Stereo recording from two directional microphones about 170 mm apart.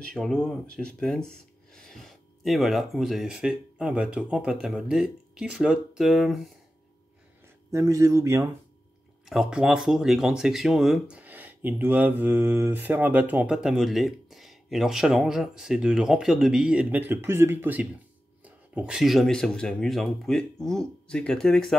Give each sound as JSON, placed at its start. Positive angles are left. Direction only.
{"t": 0.0, "sound": "speech", "side_deg": 5}
{"t": 7.7, "sound": "speech", "side_deg": -20}
{"t": 9.2, "sound": "speech", "side_deg": 0}